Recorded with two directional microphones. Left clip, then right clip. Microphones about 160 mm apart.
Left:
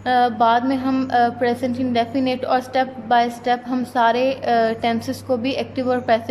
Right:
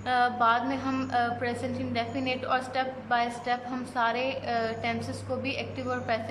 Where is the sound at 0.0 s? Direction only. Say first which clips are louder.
Left 8 dB; 35° left (ahead or behind).